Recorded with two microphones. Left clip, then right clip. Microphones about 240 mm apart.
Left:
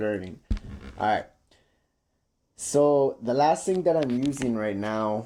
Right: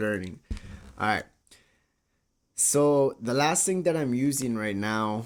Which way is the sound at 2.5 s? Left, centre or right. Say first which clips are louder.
Left 1 dB; right.